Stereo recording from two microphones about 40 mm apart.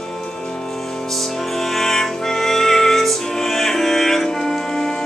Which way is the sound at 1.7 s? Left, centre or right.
Centre.